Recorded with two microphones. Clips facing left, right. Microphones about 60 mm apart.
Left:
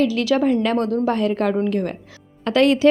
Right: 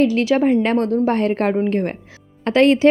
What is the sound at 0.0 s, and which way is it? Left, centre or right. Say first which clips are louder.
A woman's voice: right 2 dB; right.